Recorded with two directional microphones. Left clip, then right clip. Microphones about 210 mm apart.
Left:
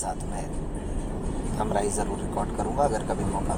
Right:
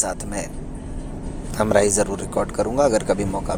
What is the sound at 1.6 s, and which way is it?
Speech, 55° right (ahead or behind).